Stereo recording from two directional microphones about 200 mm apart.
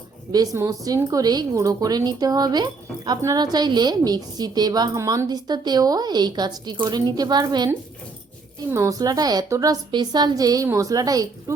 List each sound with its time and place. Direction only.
0.3 s speech: 15° right (ahead or behind)
8.7 s a woman's voice: 15° right (ahead or behind)